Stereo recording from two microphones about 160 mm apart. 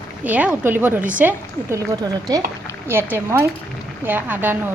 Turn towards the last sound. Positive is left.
turn(degrees=-10)  # may be behind; listen again after turning